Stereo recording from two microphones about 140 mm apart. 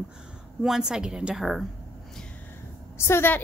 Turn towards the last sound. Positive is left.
turn(degrees=15)  # may be behind; listen again after turning